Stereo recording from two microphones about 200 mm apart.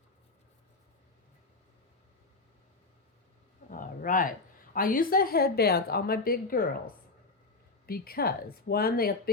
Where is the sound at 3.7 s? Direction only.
40° left (ahead or behind).